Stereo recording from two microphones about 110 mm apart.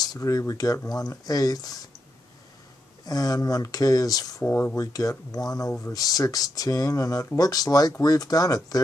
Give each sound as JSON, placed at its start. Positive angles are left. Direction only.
{"t": 0.0, "sound": "speech", "side_deg": 35}
{"t": 3.1, "sound": "speech", "side_deg": 35}
{"t": 4.5, "sound": "speech", "side_deg": 20}
{"t": 4.9, "sound": "speech", "side_deg": 35}